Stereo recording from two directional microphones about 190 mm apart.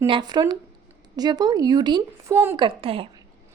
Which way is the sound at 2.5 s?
25° right (ahead or behind).